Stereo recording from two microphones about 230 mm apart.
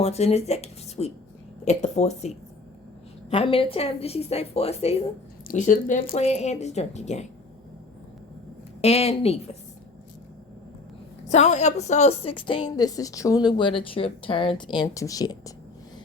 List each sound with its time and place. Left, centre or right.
0.0 s a woman's voice: left
8.8 s a woman's voice: left
11.3 s a woman's voice: left